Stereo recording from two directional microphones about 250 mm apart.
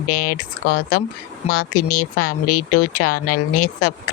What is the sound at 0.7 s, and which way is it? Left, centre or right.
Speech, left.